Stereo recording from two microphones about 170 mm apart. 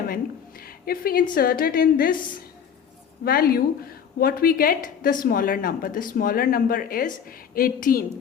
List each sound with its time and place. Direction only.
0.1 s a woman's voice: 60° left (ahead or behind)
3.2 s speech: 60° left (ahead or behind)